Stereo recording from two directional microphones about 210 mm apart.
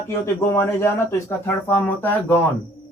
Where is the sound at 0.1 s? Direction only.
10° left (ahead or behind).